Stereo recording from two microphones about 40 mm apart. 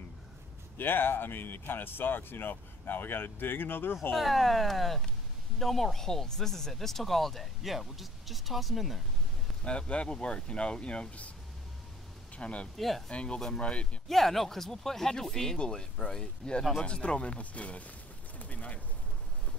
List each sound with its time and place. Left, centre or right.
0.7 s speech: left
4.1 s speech: centre
9.7 s speech: left
12.4 s speech: left
12.7 s speech: centre
13.1 s speech: left
14.0 s speech: centre; by 17.8 s left
18.4 s bird: left